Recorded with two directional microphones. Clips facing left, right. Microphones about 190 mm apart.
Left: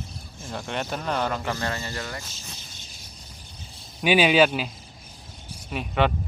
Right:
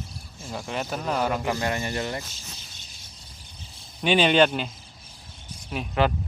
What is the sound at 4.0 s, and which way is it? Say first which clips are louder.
Speech: left 1 dB; 5° left (ahead or behind).